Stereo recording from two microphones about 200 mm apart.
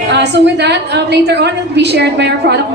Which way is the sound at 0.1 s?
60° right (ahead or behind).